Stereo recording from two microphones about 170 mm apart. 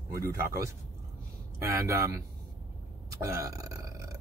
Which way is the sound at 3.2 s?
20° right (ahead or behind).